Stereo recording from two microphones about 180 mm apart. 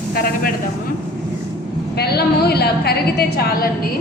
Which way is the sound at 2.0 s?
60° left (ahead or behind).